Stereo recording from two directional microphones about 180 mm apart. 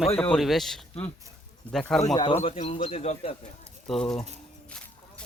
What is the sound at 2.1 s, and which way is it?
A man's voice, 25° left (ahead or behind).